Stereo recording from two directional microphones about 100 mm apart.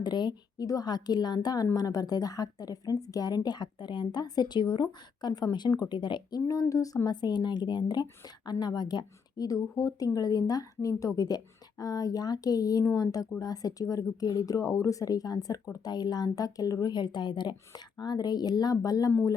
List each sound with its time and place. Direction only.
0.0 s a woman's voice: 45° left (ahead or behind)
6.5 s a woman's voice: 35° left (ahead or behind)